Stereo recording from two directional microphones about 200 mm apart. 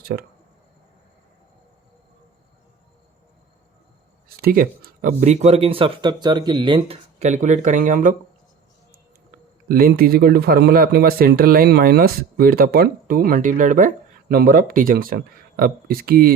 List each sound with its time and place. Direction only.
0.0 s speech: 50° right (ahead or behind)
4.4 s speech: 50° right (ahead or behind)
9.6 s speech: 45° right (ahead or behind)